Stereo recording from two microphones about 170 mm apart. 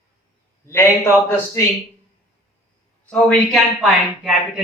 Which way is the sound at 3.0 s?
Centre (ahead or behind).